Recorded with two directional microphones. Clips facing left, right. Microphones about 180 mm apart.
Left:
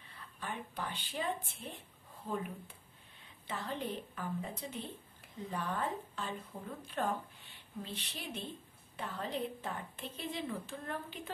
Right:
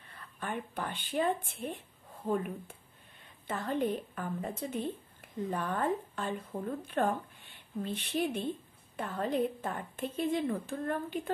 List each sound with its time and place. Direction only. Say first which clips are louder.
0.1 s a woman's voice: right 6 dB; 50° right (ahead or behind)